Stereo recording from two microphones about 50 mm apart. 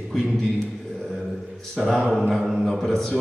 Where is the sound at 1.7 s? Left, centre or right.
Centre.